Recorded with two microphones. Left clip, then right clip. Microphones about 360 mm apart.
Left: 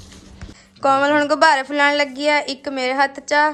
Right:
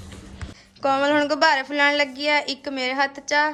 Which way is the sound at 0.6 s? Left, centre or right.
Centre.